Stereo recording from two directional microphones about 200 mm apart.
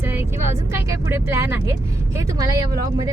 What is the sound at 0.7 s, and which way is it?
Speech, 10° right (ahead or behind).